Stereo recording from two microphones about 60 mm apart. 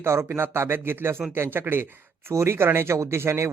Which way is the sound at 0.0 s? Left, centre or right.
Right.